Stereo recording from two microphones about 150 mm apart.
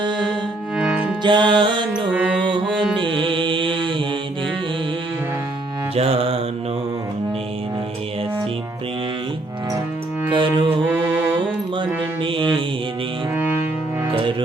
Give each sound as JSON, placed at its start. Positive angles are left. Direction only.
{"t": 0.8, "sound": "music", "side_deg": -10}
{"t": 1.2, "sound": "music", "side_deg": -30}
{"t": 3.0, "sound": "music", "side_deg": -35}
{"t": 5.9, "sound": "mantra", "side_deg": -40}
{"t": 10.2, "sound": "music", "side_deg": -30}
{"t": 10.7, "sound": "mantra", "side_deg": -10}
{"t": 12.2, "sound": "mantra", "side_deg": -35}
{"t": 14.1, "sound": "music", "side_deg": -35}